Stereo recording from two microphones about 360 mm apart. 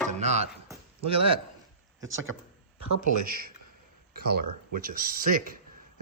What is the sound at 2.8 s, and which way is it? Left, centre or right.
Speech, right.